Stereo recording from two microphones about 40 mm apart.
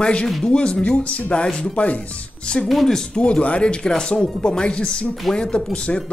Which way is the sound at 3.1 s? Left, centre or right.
Left.